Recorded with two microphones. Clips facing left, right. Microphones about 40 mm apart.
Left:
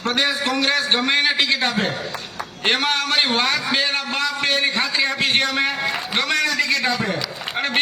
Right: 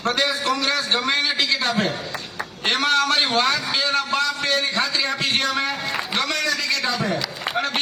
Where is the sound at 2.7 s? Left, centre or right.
Centre.